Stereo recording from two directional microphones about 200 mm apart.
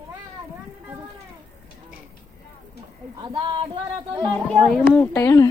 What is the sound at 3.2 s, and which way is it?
Speech, 25° right (ahead or behind).